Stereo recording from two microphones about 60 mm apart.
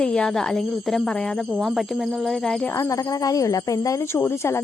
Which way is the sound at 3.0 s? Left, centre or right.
Left.